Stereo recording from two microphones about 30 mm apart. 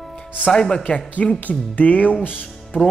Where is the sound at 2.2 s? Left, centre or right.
Left.